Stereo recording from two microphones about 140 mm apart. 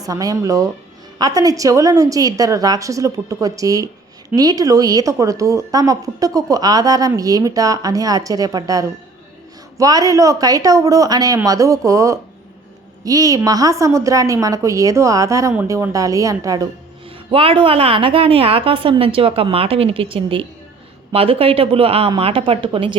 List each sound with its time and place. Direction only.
0.0 s a woman's voice: 25° right (ahead or behind)
17.3 s a woman's voice: 40° right (ahead or behind)